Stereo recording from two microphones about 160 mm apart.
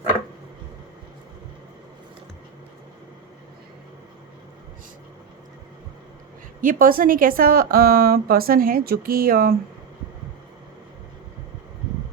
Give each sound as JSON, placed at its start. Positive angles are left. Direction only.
{"t": 6.6, "sound": "a woman's voice", "side_deg": -60}